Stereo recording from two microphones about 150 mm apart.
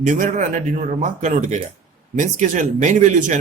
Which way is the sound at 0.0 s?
60° right (ahead or behind).